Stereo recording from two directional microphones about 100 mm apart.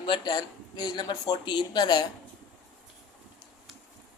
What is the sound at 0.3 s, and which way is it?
Speech, 45° left (ahead or behind).